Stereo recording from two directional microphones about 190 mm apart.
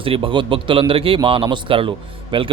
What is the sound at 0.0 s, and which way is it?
A man's voice, 30° right (ahead or behind).